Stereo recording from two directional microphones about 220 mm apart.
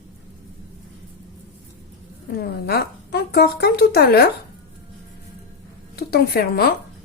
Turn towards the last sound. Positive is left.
turn(degrees=45)  # may be behind; listen again after turning